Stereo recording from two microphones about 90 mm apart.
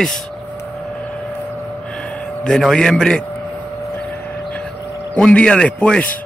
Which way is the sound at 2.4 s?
5° left (ahead or behind).